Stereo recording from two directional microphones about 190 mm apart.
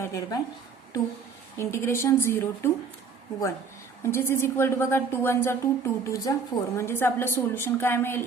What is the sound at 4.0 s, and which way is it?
A woman's voice, 15° left (ahead or behind).